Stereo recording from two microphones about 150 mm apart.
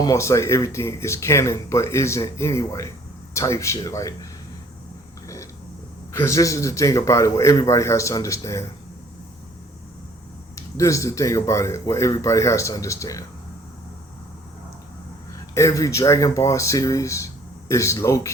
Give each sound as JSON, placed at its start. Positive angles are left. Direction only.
{"t": 0.0, "sound": "speech", "side_deg": 20}
{"t": 6.1, "sound": "speech", "side_deg": 20}
{"t": 10.5, "sound": "speech", "side_deg": 20}
{"t": 15.5, "sound": "speech", "side_deg": 20}